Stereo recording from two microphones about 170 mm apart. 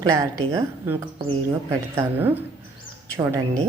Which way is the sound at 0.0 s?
20° right (ahead or behind).